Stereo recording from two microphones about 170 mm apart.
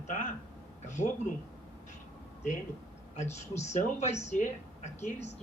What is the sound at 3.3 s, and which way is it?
A man's voice, 40° left (ahead or behind).